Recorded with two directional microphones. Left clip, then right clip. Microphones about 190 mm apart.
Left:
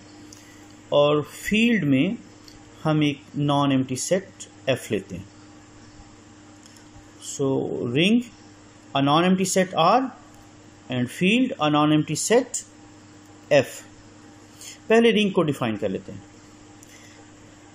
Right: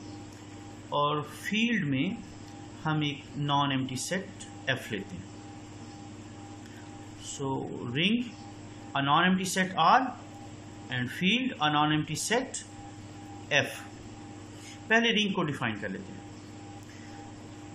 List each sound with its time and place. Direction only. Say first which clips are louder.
0.9 s speech: left 10 dB; 20° left (ahead or behind)
7.2 s speech: left 10 dB; 20° left (ahead or behind)
14.9 s speech: left 7 dB; 20° left (ahead or behind)